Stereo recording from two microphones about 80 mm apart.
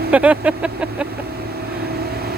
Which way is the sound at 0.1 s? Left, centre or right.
Centre.